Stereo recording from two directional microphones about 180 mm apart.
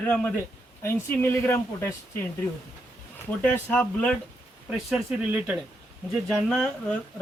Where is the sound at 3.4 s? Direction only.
10° left (ahead or behind).